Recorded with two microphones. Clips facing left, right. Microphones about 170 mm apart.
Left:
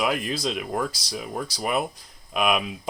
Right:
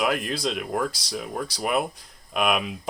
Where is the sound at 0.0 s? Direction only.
Centre (ahead or behind).